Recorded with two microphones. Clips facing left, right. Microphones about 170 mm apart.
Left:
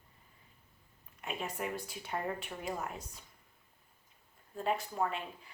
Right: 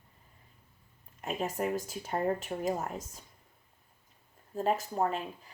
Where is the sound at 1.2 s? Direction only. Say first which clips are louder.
Right 6 dB; 40° right (ahead or behind).